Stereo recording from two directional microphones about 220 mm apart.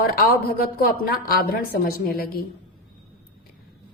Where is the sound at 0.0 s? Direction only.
45° left (ahead or behind).